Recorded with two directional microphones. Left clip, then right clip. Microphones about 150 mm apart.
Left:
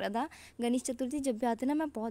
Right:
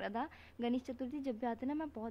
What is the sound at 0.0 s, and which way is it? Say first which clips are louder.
Speech: left 6 dB; 40° left (ahead or behind).